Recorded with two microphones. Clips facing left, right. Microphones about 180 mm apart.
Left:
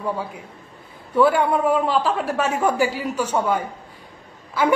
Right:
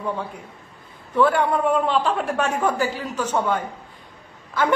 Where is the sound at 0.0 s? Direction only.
5° left (ahead or behind).